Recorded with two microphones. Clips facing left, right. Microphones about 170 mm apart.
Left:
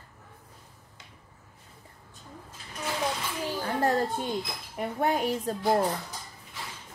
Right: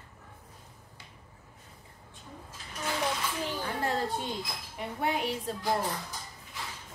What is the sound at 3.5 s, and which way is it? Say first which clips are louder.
A woman's voice: left 7 dB; 40° left (ahead or behind).